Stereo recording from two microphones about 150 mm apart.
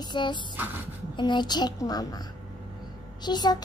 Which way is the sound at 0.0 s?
30° left (ahead or behind).